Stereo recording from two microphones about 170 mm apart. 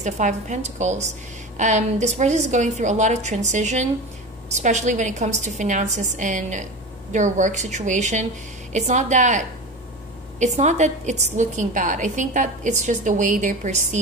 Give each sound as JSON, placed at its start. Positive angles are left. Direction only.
{"t": 0.0, "sound": "a woman's voice", "side_deg": -45}